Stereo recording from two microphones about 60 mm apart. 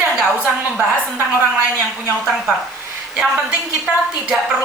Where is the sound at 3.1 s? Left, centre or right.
Centre.